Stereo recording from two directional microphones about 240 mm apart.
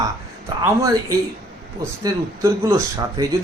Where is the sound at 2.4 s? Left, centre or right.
Centre.